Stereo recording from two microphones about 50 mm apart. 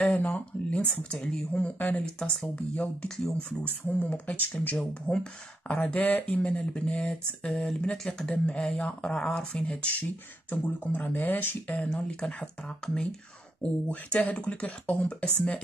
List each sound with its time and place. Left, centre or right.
0.2 s speech: left
1.1 s speech: centre
1.6 s speech: left
5.0 s speech: centre
10.5 s speech: left
11.9 s speech: centre